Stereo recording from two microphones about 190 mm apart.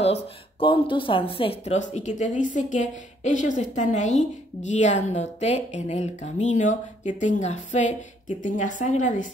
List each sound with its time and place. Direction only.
0.0 s speech: 30° left (ahead or behind)